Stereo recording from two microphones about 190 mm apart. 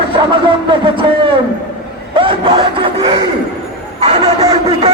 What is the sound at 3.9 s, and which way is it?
Speech, 35° right (ahead or behind).